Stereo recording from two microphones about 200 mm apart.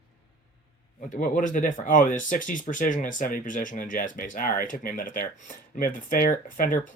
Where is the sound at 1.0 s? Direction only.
40° left (ahead or behind).